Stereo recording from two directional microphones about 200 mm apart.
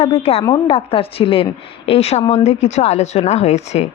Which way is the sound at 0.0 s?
30° left (ahead or behind).